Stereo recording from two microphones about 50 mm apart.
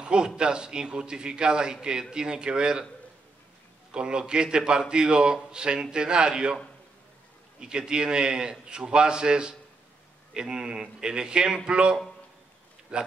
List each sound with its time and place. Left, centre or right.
0.0 s a man's voice: centre
3.9 s a man's voice: centre
7.6 s a man's voice: centre